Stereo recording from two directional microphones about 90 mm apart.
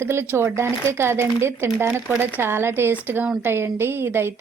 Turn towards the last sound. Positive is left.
turn(degrees=-25)  # may be behind; listen again after turning